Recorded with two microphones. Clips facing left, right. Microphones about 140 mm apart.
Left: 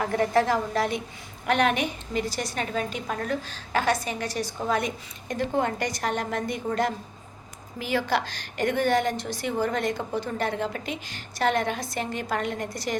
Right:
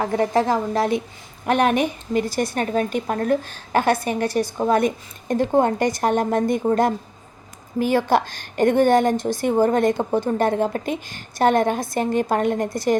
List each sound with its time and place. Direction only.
0.0 s a woman's voice: 25° right (ahead or behind); by 6.7 s 50° right (ahead or behind)
7.8 s a woman's voice: 50° right (ahead or behind)